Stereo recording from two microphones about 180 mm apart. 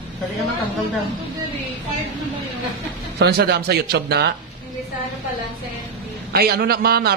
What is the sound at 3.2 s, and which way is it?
A man's voice, 65° right (ahead or behind).